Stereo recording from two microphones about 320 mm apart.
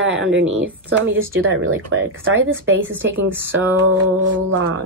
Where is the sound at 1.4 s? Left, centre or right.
Right.